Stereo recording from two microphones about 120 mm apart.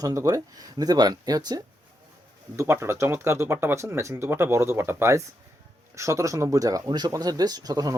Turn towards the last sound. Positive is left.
turn(degrees=-30)  # may be behind; listen again after turning